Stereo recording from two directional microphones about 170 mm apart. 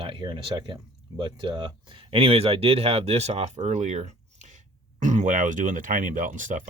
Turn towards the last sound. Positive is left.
turn(degrees=-50)  # may be behind; listen again after turning